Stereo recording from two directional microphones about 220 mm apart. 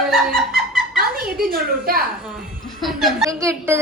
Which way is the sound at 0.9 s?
40° right (ahead or behind).